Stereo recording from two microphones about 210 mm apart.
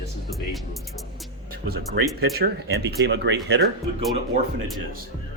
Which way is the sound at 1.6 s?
45° right (ahead or behind).